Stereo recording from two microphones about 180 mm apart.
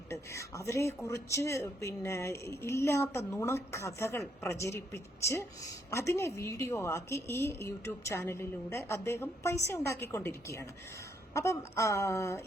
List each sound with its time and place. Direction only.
0.1 s speech: 15° left (ahead or behind)